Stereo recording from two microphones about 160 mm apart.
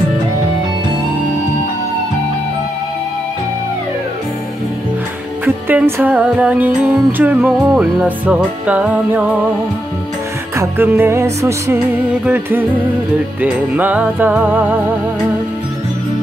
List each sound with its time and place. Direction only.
5.4 s music: 10° right (ahead or behind)
10.6 s music: 15° right (ahead or behind)